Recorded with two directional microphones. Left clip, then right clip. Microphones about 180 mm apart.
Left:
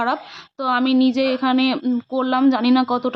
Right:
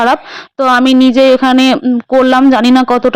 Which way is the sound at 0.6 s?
45° right (ahead or behind).